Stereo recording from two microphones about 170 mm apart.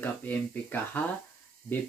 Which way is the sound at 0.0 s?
10° left (ahead or behind).